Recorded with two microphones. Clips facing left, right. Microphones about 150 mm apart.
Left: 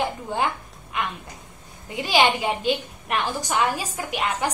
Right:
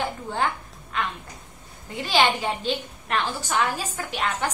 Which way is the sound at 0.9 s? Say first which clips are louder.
Even; 15° left (ahead or behind).